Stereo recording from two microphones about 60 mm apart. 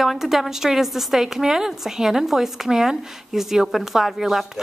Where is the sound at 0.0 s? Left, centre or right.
Centre.